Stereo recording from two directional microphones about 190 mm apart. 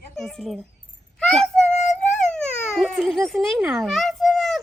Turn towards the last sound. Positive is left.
turn(degrees=0)  # may be behind; listen again after turning